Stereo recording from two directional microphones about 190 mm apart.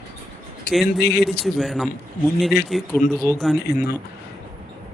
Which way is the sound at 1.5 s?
Centre (ahead or behind).